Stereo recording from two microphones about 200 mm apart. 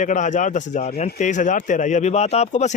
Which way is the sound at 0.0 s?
40° left (ahead or behind).